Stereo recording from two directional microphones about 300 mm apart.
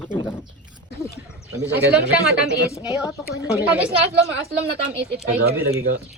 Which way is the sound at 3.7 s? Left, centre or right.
Centre.